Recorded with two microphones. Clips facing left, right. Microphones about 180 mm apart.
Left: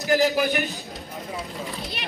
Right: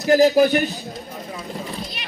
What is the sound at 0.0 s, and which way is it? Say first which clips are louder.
Speech: right 7 dB; 40° right (ahead or behind).